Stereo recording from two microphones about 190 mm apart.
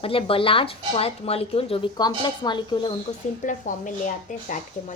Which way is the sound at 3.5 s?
45° left (ahead or behind).